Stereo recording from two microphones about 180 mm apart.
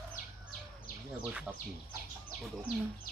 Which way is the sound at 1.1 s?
5° right (ahead or behind).